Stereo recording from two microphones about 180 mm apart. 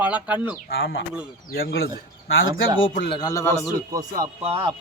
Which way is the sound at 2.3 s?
90° left.